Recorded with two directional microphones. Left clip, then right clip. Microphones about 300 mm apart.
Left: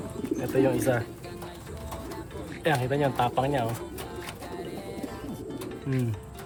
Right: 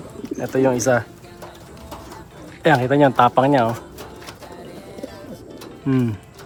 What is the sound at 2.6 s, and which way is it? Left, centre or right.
Speech, right.